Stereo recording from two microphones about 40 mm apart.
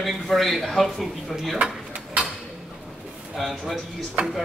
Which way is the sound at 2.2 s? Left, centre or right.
Right.